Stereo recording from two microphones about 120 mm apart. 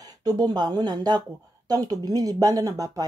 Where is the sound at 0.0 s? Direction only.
30° right (ahead or behind).